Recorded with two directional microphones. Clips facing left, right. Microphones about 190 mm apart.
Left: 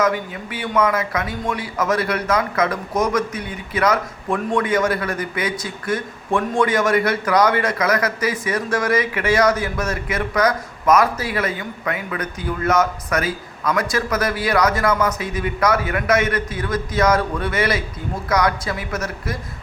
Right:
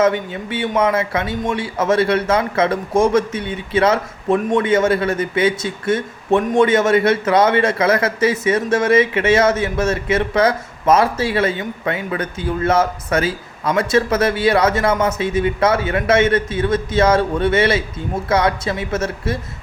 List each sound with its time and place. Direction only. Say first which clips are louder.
0.0 s a man's voice: right 4 dB; 25° right (ahead or behind)